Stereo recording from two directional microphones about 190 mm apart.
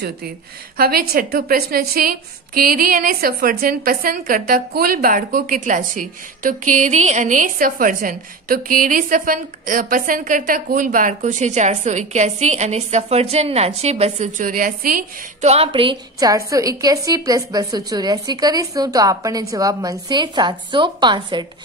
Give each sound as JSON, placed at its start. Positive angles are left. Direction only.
{"t": 0.7, "sound": "a woman's voice", "side_deg": -55}
{"t": 14.4, "sound": "a woman's voice", "side_deg": -45}
{"t": 15.4, "sound": "a woman's voice", "side_deg": -30}